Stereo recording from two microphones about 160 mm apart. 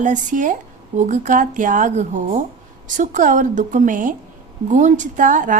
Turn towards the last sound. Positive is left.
turn(degrees=-55)  # may be behind; listen again after turning